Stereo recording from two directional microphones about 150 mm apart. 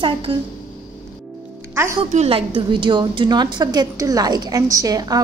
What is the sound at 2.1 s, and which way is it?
A woman's voice, 45° right (ahead or behind).